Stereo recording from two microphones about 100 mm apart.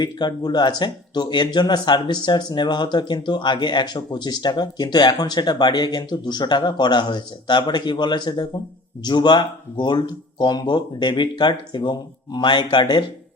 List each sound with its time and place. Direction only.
0.0 s speech: 45° left (ahead or behind)